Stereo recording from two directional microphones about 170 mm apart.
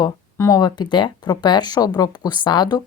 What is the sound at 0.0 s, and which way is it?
Speech, 20° left (ahead or behind).